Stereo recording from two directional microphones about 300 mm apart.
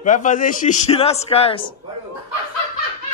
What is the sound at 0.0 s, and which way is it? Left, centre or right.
A man's voice, left.